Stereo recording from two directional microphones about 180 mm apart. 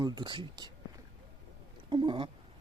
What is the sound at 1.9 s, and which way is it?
Speech, 25° right (ahead or behind).